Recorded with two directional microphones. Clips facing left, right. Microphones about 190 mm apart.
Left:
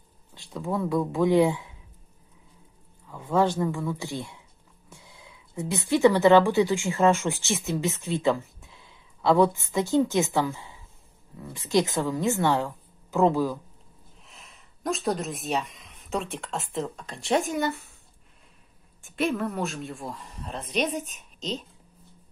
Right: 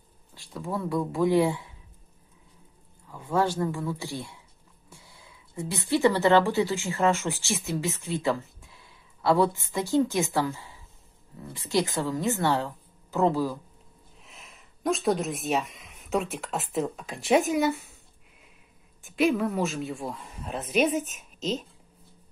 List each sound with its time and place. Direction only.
0.3 s speech: 20° left (ahead or behind)
3.2 s a man's voice: 20° left (ahead or behind)
14.2 s speech: centre (ahead or behind)
19.0 s speech: centre (ahead or behind)